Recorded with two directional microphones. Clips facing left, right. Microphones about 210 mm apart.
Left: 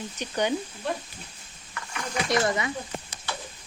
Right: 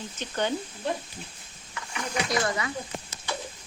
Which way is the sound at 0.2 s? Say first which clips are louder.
Left 2 dB; 15° left (ahead or behind).